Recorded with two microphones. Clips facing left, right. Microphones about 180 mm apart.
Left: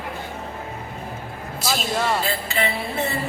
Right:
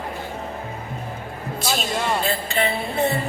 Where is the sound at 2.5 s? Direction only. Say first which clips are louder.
Right 2 dB; 35° right (ahead or behind).